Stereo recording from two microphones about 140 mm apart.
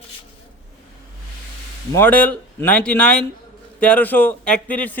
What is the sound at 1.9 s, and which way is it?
Speech, 10° left (ahead or behind).